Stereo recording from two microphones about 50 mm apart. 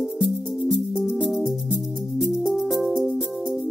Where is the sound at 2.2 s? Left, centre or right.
Centre.